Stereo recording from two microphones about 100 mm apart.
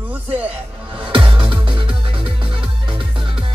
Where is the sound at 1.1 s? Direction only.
55° right (ahead or behind).